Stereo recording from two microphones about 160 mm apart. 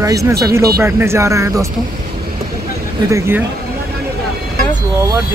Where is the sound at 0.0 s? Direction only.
20° right (ahead or behind).